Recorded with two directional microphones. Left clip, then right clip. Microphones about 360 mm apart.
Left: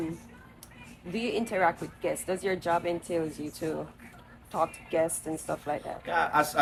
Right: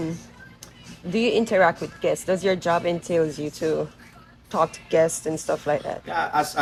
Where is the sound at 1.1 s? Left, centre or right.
Right.